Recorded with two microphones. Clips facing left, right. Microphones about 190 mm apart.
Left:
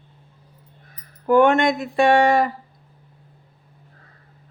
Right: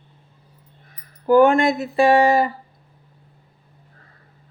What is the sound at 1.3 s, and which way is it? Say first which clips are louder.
Speech: right 2 dB; centre (ahead or behind).